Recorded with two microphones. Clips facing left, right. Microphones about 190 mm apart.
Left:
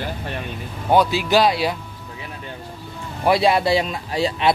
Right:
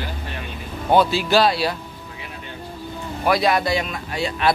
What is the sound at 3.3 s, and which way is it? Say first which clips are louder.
Speech: left 2 dB; 25° left (ahead or behind).